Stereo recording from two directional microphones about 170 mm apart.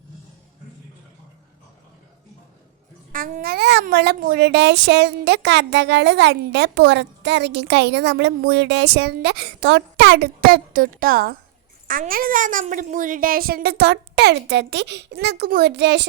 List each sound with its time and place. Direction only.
3.1 s a child's voice: 50° right (ahead or behind); by 16.0 s 85° right